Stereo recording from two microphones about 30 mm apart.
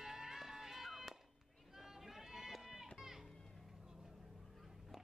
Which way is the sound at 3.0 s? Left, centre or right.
Centre.